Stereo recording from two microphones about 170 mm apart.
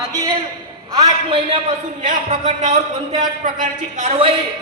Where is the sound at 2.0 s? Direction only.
45° right (ahead or behind).